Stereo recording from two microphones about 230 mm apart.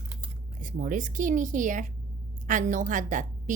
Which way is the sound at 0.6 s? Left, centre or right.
Right.